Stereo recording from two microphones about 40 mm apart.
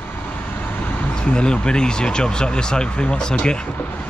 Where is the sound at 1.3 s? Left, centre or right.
Left.